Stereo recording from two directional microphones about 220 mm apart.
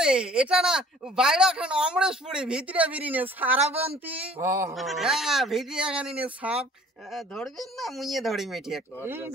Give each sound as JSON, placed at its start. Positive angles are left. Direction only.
{"t": 0.0, "sound": "speech", "side_deg": -5}
{"t": 3.6, "sound": "speech", "side_deg": -25}
{"t": 4.1, "sound": "a sound", "side_deg": -10}
{"t": 4.7, "sound": "speech", "side_deg": 0}
{"t": 7.2, "sound": "speech", "side_deg": 0}